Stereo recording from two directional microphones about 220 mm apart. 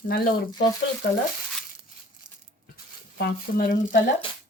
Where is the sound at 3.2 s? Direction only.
40° left (ahead or behind).